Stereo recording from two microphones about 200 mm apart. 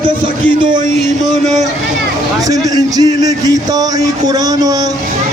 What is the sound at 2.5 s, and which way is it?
A man's voice, 20° right (ahead or behind).